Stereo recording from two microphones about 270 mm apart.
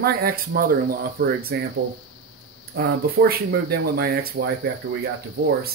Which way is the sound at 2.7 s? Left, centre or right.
Right.